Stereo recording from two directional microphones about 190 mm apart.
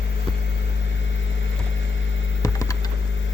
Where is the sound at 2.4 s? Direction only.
20° left (ahead or behind).